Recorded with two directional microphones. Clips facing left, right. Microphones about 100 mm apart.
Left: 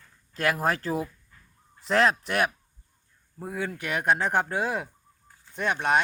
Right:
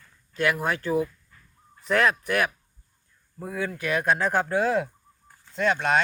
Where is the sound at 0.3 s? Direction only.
35° left (ahead or behind).